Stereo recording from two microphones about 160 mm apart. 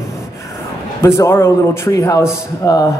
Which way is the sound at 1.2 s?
15° left (ahead or behind).